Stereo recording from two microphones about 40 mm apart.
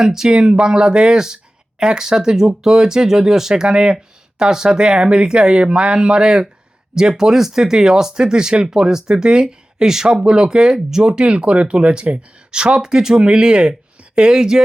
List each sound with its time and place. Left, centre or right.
0.0 s speech: centre
3.5 s speech: right